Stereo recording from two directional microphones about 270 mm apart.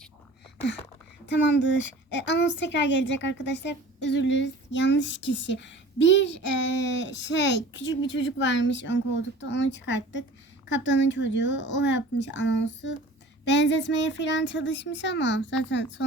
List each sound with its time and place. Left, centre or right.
2.1 s a woman's voice: left